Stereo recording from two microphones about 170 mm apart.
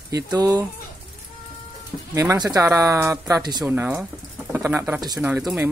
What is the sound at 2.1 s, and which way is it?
Speech, 20° right (ahead or behind).